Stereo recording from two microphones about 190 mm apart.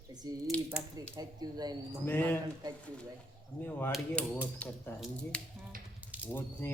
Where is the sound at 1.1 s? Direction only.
20° right (ahead or behind).